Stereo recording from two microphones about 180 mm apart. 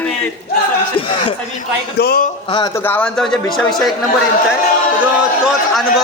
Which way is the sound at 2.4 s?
25° left (ahead or behind).